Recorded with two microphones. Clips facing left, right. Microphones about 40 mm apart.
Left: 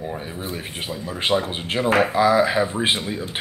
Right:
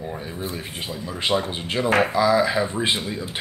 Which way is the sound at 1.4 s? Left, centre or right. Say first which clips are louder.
Left 1 dB; centre.